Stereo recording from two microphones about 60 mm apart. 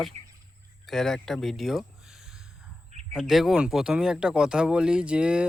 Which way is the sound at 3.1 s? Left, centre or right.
Centre.